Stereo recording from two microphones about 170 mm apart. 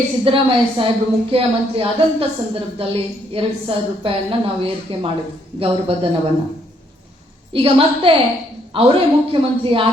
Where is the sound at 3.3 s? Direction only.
30° right (ahead or behind).